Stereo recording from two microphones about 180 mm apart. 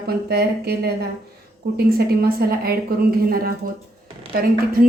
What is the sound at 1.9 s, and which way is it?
A woman's voice, 60° right (ahead or behind).